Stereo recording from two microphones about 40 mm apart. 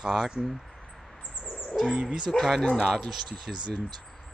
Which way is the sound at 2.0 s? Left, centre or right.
Right.